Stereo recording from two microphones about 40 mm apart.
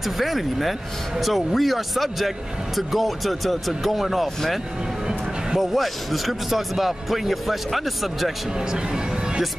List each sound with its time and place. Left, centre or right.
0.0 s speech: centre
5.6 s speech: centre
8.5 s music: centre